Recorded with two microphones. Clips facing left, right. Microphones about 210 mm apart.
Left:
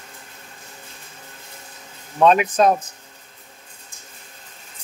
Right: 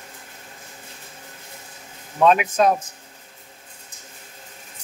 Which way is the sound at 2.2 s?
35° left (ahead or behind).